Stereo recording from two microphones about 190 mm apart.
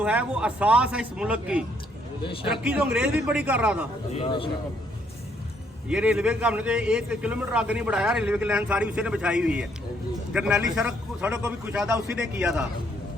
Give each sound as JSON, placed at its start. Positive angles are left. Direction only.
{"t": 0.0, "sound": "a man's voice", "side_deg": -5}
{"t": 4.1, "sound": "a man's voice", "side_deg": 30}
{"t": 5.9, "sound": "a man's voice", "side_deg": -5}